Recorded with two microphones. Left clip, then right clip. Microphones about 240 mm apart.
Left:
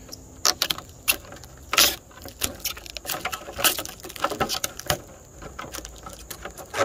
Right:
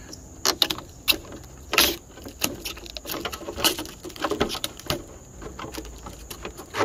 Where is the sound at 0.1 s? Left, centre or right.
Left.